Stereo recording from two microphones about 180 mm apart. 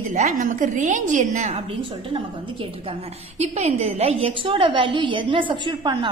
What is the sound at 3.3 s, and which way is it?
A woman's voice, 35° right (ahead or behind).